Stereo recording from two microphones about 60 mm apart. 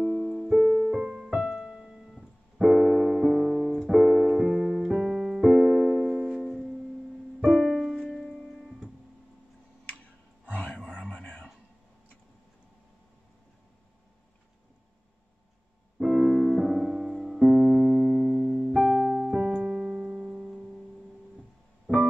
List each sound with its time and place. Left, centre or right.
0.0 s music: centre
0.5 s piano: centre
3.9 s music: centre
4.8 s music: centre
10.5 s a sound: left
10.8 s a sound: centre
16.0 s music: centre
17.1 s keyboard: centre
19.3 s music: centre